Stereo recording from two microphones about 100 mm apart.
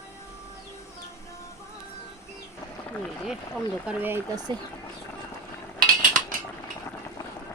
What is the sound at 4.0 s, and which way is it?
Speech, 20° right (ahead or behind).